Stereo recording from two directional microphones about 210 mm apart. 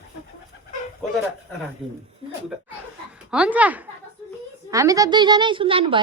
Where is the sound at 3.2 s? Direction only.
5° right (ahead or behind).